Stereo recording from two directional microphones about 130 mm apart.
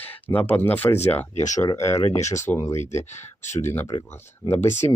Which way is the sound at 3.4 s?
65° left (ahead or behind).